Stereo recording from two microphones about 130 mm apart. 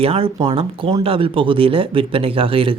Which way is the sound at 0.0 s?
45° right (ahead or behind).